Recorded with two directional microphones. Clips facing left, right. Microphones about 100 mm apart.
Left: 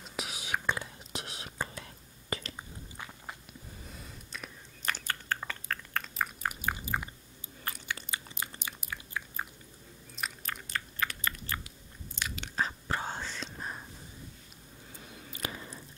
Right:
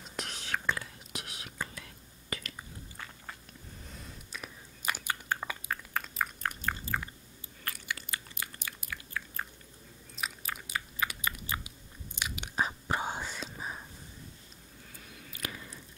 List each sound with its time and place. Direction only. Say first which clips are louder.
0.0 s whispering: left 1 dB; 5° left (ahead or behind); by 2.6 s 30° left (ahead or behind)
3.8 s chewing: even; centre (ahead or behind)
6.1 s chewing: left 2 dB; 5° left (ahead or behind)
7.6 s biting: left 1 dB; 20° left (ahead or behind)
10.1 s chewing: even; 5° right (ahead or behind)
12.2 s whispering: right 1 dB; 15° right (ahead or behind)
15.0 s a sound: left 2 dB; 25° left (ahead or behind)